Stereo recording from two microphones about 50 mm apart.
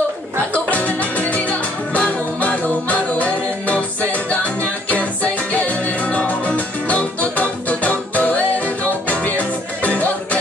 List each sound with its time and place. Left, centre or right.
0.5 s music: left